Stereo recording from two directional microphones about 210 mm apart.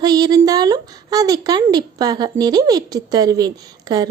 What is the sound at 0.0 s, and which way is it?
A woman's voice, 20° right (ahead or behind).